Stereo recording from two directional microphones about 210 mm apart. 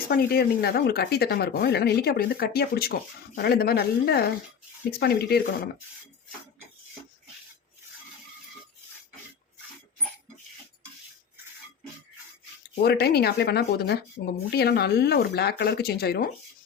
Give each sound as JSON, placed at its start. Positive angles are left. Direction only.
{"t": 0.1, "sound": "speech", "side_deg": 50}
{"t": 12.8, "sound": "speech", "side_deg": 50}